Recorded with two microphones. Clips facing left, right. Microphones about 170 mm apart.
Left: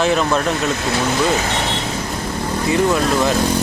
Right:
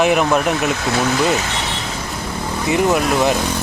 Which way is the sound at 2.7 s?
20° right (ahead or behind).